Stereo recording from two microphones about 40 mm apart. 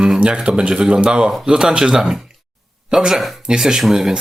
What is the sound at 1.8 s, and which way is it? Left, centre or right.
Speech, centre.